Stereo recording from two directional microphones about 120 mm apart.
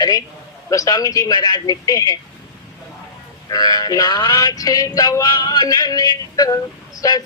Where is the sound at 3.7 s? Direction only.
30° left (ahead or behind).